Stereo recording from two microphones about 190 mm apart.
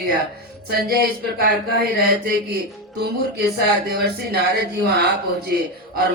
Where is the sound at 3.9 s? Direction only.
60° right (ahead or behind).